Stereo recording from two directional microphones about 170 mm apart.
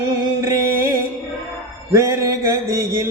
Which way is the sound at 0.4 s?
15° right (ahead or behind).